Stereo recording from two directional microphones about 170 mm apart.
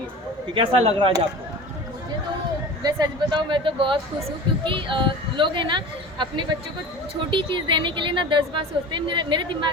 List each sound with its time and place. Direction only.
0.5 s speech: 30° right (ahead or behind)
2.8 s a woman's voice: 25° right (ahead or behind)